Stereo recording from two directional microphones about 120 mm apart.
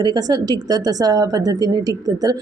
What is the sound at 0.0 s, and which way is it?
Speech, 35° right (ahead or behind).